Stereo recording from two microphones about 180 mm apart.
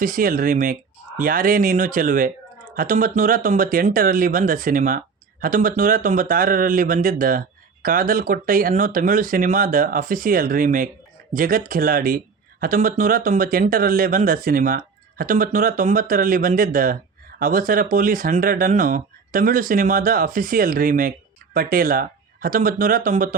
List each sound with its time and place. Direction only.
0.0 s speech: 50° right (ahead or behind)